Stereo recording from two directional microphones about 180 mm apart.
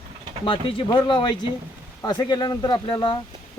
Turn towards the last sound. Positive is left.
turn(degrees=25)  # may be behind; listen again after turning